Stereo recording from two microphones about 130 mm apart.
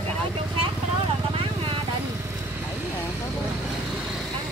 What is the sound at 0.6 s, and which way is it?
Vehicle, 45° right (ahead or behind).